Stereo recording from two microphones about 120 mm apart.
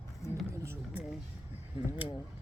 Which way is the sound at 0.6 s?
20° right (ahead or behind).